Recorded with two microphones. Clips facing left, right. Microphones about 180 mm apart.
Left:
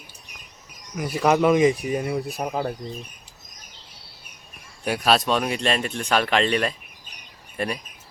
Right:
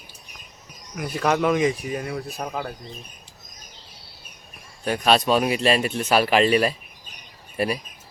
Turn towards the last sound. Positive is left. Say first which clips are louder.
# right 3 dB
turn(degrees=-5)  # may be behind; listen again after turning